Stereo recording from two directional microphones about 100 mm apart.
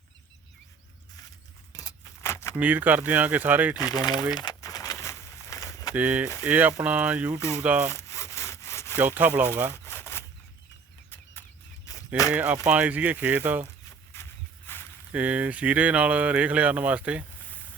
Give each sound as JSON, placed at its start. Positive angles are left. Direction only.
{"t": 1.7, "sound": "keys jangling", "side_deg": 30}
{"t": 2.6, "sound": "speech", "side_deg": -15}
{"t": 3.9, "sound": "speech", "side_deg": 40}
{"t": 4.4, "sound": "a sound", "side_deg": 40}
{"t": 5.9, "sound": "speech", "side_deg": -15}
{"t": 7.9, "sound": "sawing", "side_deg": 30}
{"t": 9.0, "sound": "speech", "side_deg": -20}
{"t": 9.7, "sound": "a sound", "side_deg": 25}
{"t": 11.9, "sound": "a sound", "side_deg": 35}
{"t": 12.3, "sound": "speech", "side_deg": -15}
{"t": 15.1, "sound": "speech", "side_deg": -15}